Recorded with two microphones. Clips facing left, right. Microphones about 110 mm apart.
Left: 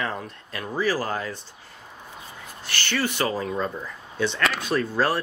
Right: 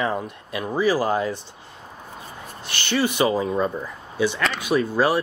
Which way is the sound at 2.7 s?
20° right (ahead or behind).